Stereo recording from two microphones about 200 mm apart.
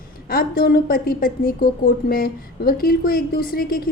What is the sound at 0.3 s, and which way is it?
A woman's voice, 50° left (ahead or behind).